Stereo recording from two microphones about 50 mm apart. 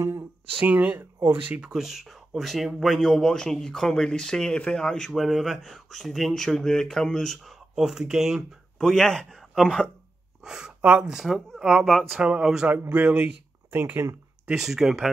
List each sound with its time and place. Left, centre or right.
0.6 s speech: right
1.6 s speech: centre
5.1 s speech: centre
7.4 s speech: centre
8.7 s a man's voice: centre
10.4 s gasp: centre
11.0 s speech: centre
11.2 s speech: centre
12.9 s speech: right
13.7 s speech: right
14.5 s speech: centre